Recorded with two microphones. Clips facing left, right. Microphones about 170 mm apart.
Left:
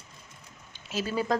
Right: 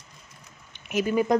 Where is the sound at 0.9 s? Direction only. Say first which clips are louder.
Right 6 dB; 15° right (ahead or behind).